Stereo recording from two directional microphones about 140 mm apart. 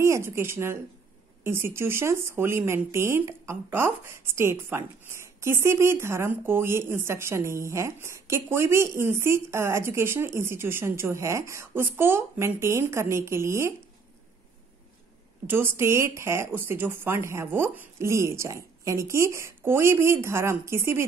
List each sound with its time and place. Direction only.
0.0 s speech: 20° right (ahead or behind)
15.4 s speech: 15° right (ahead or behind)